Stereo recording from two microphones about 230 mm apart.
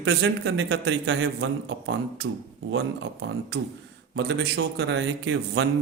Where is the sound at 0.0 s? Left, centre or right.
Right.